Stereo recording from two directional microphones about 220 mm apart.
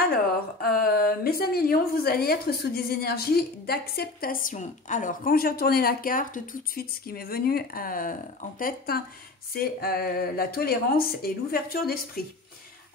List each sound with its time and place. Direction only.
0.6 s a woman's voice: 45° left (ahead or behind)